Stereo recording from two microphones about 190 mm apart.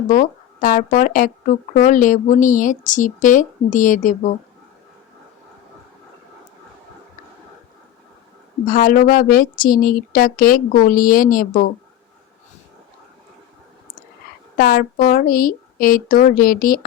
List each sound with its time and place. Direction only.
0.1 s speech: 45° left (ahead or behind)
8.6 s speech: 45° left (ahead or behind)
14.5 s speech: 50° left (ahead or behind)